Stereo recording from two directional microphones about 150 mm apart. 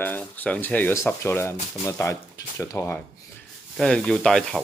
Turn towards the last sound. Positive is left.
turn(degrees=5)  # may be behind; listen again after turning